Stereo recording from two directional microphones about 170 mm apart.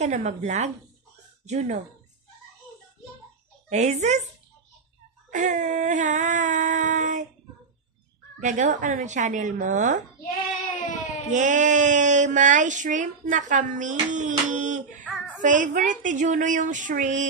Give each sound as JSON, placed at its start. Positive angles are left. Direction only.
{"t": 0.0, "sound": "a woman's voice", "side_deg": -40}
{"t": 3.6, "sound": "speech", "side_deg": -45}
{"t": 5.3, "sound": "speech", "side_deg": -45}
{"t": 8.4, "sound": "speech", "side_deg": -45}
{"t": 11.2, "sound": "speech", "side_deg": -45}